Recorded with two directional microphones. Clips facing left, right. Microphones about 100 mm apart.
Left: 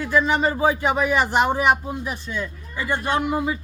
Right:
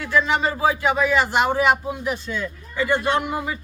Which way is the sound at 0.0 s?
15° left (ahead or behind).